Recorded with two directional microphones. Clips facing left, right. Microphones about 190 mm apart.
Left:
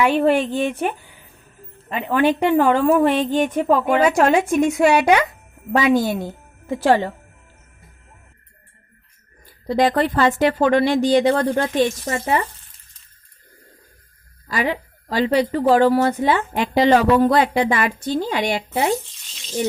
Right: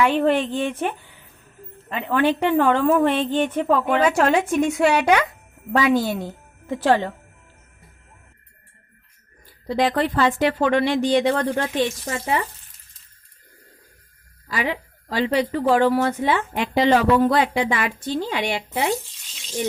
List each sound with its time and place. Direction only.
0.0 s a woman's voice: 10° left (ahead or behind)
9.6 s a woman's voice: 40° left (ahead or behind)
14.4 s a woman's voice: 45° left (ahead or behind)